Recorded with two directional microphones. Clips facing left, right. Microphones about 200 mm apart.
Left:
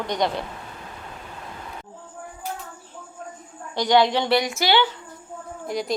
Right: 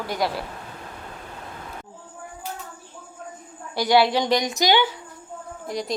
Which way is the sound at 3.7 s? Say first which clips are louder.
Even; 10° right (ahead or behind).